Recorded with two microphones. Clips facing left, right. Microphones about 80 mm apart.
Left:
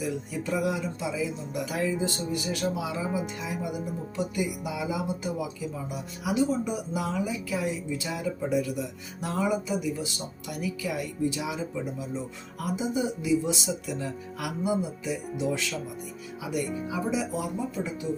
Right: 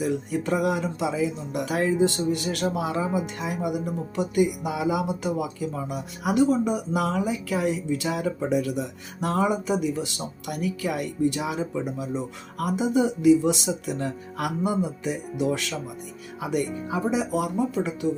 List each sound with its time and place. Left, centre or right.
0.0 s speech: right
10.5 s speech: right
16.4 s speech: right
16.6 s speech: centre
16.9 s speech: right